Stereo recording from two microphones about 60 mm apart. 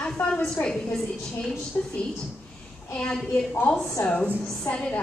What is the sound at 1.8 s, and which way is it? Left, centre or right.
Speech, left.